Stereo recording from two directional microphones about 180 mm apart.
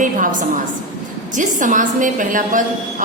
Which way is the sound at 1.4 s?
45° right (ahead or behind).